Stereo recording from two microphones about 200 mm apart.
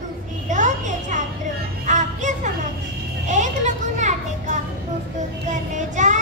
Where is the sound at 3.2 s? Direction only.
35° right (ahead or behind).